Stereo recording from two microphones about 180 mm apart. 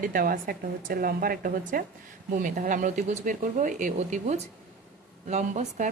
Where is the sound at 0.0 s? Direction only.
50° right (ahead or behind).